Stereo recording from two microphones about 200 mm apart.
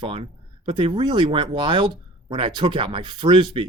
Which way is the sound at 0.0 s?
30° right (ahead or behind).